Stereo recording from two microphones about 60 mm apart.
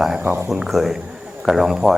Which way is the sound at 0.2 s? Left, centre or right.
Right.